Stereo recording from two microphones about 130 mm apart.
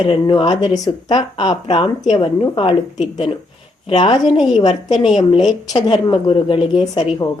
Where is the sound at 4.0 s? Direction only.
40° left (ahead or behind).